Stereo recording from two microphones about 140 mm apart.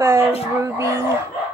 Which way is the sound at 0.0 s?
15° right (ahead or behind).